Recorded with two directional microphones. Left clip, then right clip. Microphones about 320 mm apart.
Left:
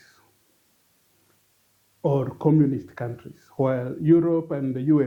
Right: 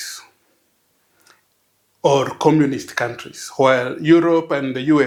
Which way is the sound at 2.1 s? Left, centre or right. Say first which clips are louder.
Right 8 dB; centre.